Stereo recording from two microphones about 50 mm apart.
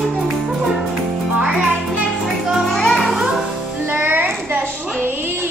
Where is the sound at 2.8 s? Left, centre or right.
Centre.